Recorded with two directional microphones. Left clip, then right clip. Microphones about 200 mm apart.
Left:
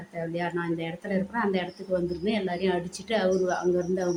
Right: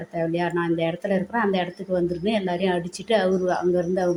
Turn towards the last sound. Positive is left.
turn(degrees=-20)  # may be behind; listen again after turning